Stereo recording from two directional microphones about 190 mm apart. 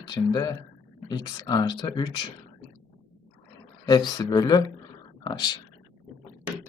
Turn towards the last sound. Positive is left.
turn(degrees=20)  # may be behind; listen again after turning